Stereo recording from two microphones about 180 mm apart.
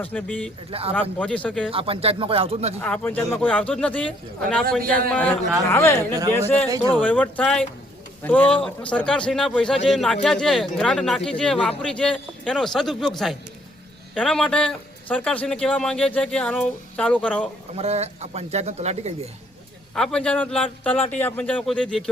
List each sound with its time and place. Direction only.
0.0 s speech: 10° left (ahead or behind)
0.7 s speech: 30° right (ahead or behind)
1.2 s speech: 5° left (ahead or behind)
1.7 s speech: 30° right (ahead or behind)
2.7 s speech: 10° left (ahead or behind)
4.8 s a man's voice: 55° right (ahead or behind)
5.1 s speech: 10° left (ahead or behind)
17.7 s speech: 35° right (ahead or behind)
20.0 s speech: 5° left (ahead or behind)